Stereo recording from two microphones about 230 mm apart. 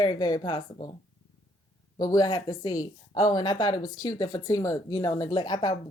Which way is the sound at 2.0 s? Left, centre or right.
Centre.